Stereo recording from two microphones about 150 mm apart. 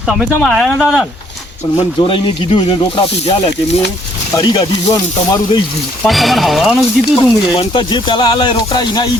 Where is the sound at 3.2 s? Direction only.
45° left (ahead or behind).